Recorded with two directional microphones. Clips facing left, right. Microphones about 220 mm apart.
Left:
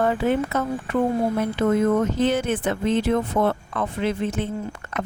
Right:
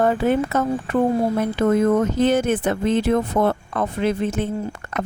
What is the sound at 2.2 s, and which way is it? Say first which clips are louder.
Speech: right 3 dB; 45° right (ahead or behind).